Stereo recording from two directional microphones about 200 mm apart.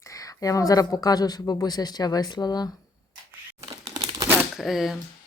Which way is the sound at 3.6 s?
20° right (ahead or behind).